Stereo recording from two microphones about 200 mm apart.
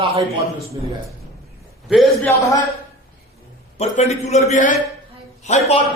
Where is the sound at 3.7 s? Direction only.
35° left (ahead or behind).